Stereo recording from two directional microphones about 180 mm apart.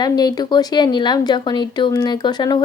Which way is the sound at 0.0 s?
20° left (ahead or behind).